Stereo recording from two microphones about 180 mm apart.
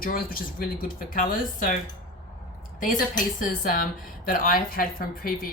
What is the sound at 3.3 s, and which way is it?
Speech, 50° left (ahead or behind).